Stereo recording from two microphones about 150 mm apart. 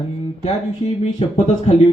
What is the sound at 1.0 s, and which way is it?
Speech, 50° left (ahead or behind).